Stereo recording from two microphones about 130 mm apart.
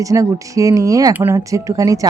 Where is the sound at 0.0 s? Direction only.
25° right (ahead or behind).